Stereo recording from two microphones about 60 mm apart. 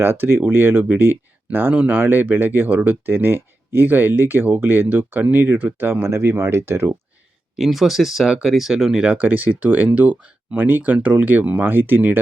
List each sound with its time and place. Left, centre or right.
0.0 s speech: right
7.5 s speech: centre
9.1 s speech: right